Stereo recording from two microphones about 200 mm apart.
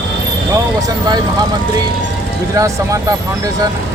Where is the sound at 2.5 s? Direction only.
15° right (ahead or behind).